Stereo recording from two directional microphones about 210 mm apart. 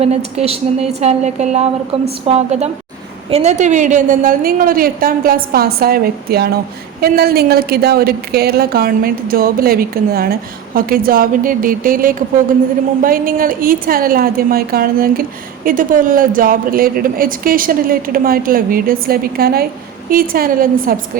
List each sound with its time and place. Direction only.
0.0 s a woman's voice: 30° right (ahead or behind)